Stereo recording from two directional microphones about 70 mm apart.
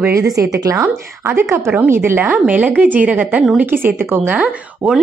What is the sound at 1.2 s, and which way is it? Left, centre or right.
A woman's voice, right.